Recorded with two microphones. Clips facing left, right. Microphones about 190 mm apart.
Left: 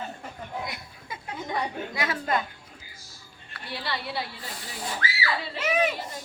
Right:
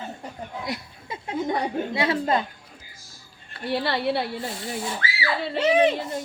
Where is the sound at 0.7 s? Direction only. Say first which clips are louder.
Right 7 dB; 25° right (ahead or behind).